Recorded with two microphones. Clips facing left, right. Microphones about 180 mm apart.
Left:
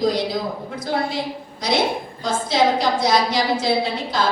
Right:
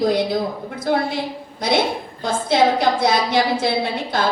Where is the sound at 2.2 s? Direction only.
55° right (ahead or behind).